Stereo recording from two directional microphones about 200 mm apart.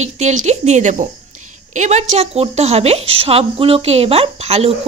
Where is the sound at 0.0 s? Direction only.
35° right (ahead or behind).